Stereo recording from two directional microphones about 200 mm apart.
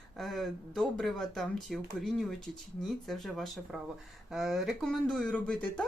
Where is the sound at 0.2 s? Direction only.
Centre (ahead or behind).